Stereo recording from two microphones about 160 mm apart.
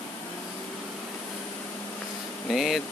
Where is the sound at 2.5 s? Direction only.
Centre (ahead or behind).